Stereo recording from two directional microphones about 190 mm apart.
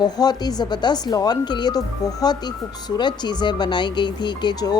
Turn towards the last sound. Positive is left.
turn(degrees=20)  # may be behind; listen again after turning